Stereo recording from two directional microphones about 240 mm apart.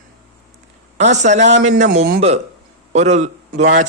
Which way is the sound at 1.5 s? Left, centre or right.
Right.